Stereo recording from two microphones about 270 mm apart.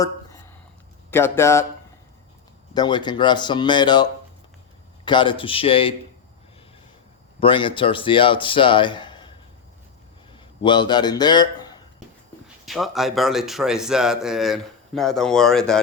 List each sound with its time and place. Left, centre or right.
1.1 s speech: centre
2.7 s speech: centre
7.3 s speech: centre
10.3 s a man's voice: centre
12.6 s speech: centre